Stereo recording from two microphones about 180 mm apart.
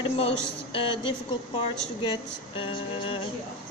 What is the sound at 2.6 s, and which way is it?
Speech, 30° left (ahead or behind).